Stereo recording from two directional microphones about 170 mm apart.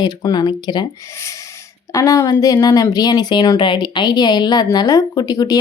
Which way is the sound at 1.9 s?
20° left (ahead or behind).